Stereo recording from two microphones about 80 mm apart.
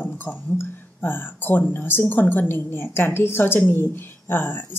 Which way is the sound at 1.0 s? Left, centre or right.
Left.